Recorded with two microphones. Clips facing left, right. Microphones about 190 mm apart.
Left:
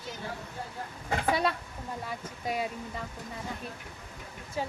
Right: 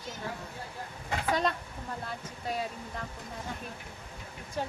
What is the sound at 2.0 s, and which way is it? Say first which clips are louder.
Speech: left 4 dB; 10° left (ahead or behind).